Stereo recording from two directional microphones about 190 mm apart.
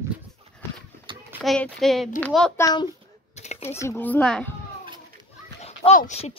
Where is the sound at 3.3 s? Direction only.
35° left (ahead or behind).